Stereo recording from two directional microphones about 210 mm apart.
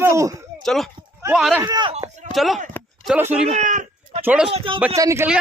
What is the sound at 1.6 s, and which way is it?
Speech, 20° right (ahead or behind).